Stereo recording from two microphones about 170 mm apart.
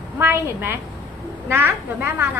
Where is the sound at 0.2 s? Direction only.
15° right (ahead or behind).